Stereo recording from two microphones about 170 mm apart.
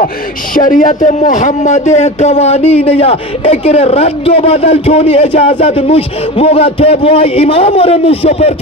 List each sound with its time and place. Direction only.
0.6 s a man's voice: 50° left (ahead or behind)